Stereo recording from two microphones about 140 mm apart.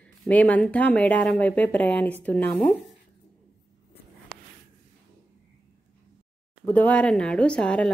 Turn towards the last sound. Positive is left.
turn(degrees=5)  # may be behind; listen again after turning